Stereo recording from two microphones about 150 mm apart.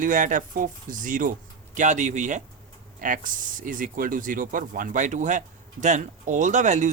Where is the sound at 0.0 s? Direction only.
60° right (ahead or behind).